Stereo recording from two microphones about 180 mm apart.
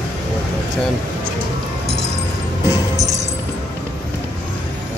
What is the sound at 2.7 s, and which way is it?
Music, 20° right (ahead or behind).